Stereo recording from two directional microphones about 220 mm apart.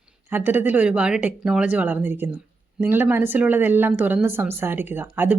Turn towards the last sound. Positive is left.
turn(degrees=-10)  # may be behind; listen again after turning